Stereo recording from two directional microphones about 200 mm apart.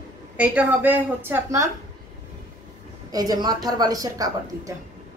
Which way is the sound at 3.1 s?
20° right (ahead or behind).